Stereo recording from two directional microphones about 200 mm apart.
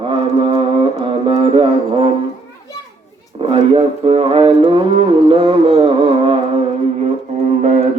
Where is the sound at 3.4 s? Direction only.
25° right (ahead or behind).